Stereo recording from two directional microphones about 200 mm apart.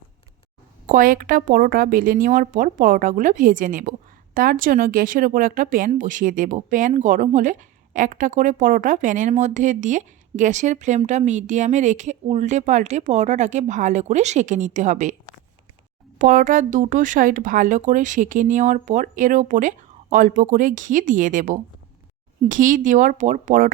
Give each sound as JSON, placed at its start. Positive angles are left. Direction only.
{"t": 0.9, "sound": "speech", "side_deg": -45}
{"t": 16.1, "sound": "speech", "side_deg": -40}